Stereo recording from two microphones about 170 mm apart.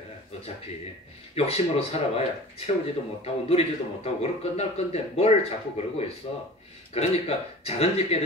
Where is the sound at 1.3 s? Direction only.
35° left (ahead or behind).